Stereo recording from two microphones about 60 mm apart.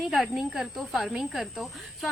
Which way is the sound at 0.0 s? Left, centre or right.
Centre.